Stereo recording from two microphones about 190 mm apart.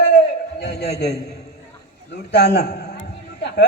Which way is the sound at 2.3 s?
60° left (ahead or behind).